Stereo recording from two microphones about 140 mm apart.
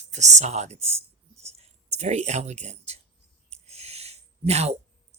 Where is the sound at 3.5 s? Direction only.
50° right (ahead or behind).